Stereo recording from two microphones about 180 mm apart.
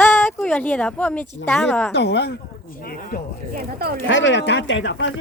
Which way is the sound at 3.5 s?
55° right (ahead or behind).